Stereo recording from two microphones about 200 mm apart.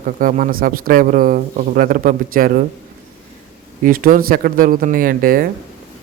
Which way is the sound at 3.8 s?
45° right (ahead or behind).